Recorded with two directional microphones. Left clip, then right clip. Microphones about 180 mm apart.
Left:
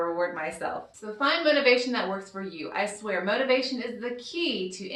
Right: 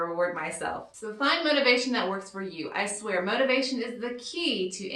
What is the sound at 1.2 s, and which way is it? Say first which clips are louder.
A woman's voice: left 1 dB; 15° right (ahead or behind).